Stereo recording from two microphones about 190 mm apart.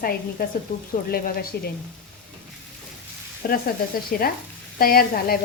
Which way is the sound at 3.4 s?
50° left (ahead or behind).